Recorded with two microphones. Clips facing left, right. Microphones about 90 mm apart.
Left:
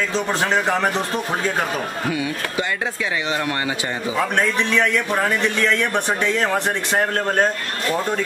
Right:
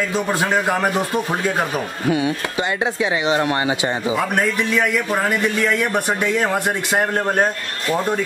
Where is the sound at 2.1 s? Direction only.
25° right (ahead or behind).